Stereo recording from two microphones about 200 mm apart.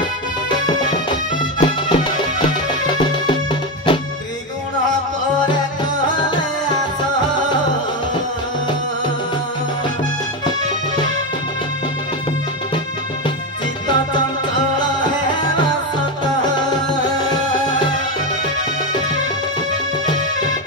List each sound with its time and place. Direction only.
1.6 s music: 25° left (ahead or behind)
20.1 s music: 20° left (ahead or behind)